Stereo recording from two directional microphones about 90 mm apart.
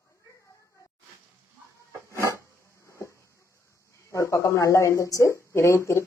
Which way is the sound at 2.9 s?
35° left (ahead or behind).